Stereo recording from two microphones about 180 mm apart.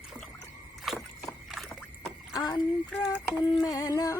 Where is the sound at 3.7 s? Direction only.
20° left (ahead or behind).